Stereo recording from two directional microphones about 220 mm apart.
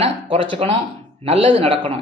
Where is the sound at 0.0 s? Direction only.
25° right (ahead or behind).